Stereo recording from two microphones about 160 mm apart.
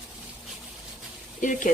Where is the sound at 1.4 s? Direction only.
55° left (ahead or behind).